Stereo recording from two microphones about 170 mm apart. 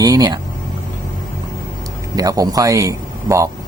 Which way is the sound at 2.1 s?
20° right (ahead or behind).